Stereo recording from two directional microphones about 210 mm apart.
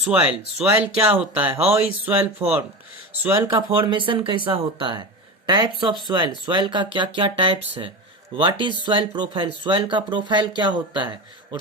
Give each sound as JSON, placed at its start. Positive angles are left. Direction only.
{"t": 0.0, "sound": "speech", "side_deg": -5}
{"t": 3.5, "sound": "speech", "side_deg": -25}